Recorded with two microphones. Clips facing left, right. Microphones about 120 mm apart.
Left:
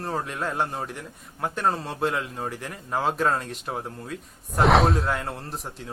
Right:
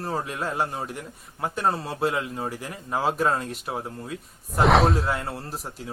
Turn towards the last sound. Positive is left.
turn(degrees=-5)  # may be behind; listen again after turning